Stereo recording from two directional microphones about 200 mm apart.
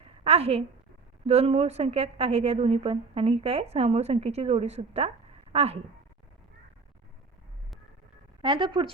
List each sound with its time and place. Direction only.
0.0 s a sound: 30° right (ahead or behind)
1.3 s a woman's voice: 30° right (ahead or behind)
8.4 s speech: 25° right (ahead or behind)